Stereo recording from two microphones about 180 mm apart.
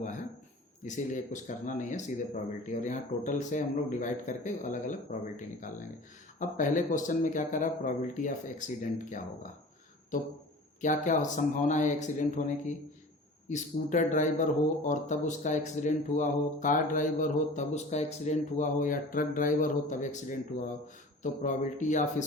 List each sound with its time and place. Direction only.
0.0 s a sound: 45° left (ahead or behind)
0.9 s speech: 45° left (ahead or behind)
10.8 s speech: 45° left (ahead or behind)
21.4 s speech: 45° left (ahead or behind)